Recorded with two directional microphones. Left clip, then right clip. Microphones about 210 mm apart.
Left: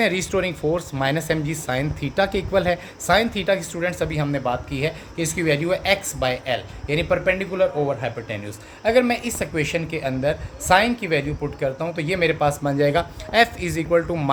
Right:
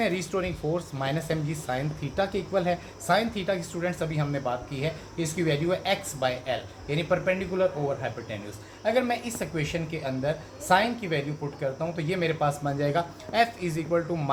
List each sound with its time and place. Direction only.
0.0 s speech: 55° left (ahead or behind)